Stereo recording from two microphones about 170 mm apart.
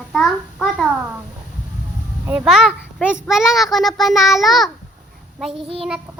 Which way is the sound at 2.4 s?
Centre (ahead or behind).